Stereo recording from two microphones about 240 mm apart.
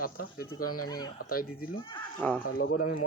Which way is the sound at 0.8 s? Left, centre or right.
Centre.